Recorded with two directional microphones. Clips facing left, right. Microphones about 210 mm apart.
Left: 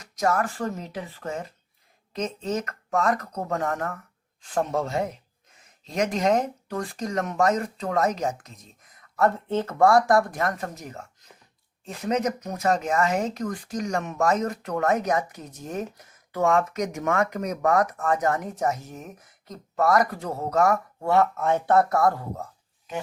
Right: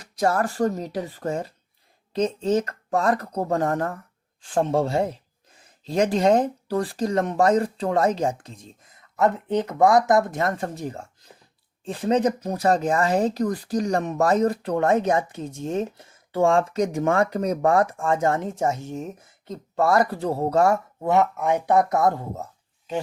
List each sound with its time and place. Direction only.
0.0 s speech: 30° right (ahead or behind)